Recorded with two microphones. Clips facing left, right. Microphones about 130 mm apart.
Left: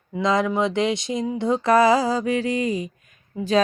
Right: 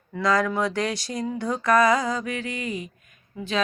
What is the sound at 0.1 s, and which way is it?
Speech, 25° left (ahead or behind).